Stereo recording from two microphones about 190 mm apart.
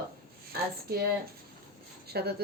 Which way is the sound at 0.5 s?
55° right (ahead or behind).